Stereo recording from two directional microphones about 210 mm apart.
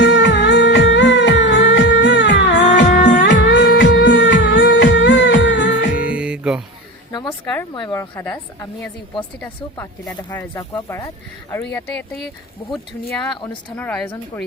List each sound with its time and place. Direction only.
0.0 s music: 55° left (ahead or behind)
6.0 s music: 5° right (ahead or behind)
7.1 s a sound: 20° left (ahead or behind)
7.7 s speech: 20° left (ahead or behind)
8.1 s speech: 10° left (ahead or behind)
9.4 s speech: 10° left (ahead or behind)